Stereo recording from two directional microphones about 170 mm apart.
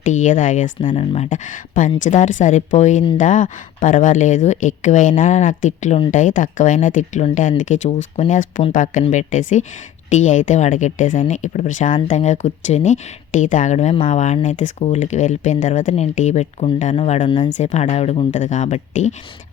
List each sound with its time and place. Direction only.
0.0 s speech: 45° left (ahead or behind)